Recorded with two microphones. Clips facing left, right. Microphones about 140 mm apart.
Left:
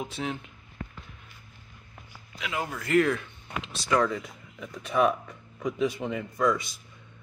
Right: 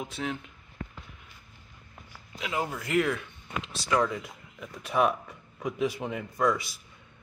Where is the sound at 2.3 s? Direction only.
30° right (ahead or behind).